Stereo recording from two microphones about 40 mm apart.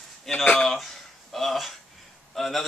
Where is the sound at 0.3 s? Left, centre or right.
Centre.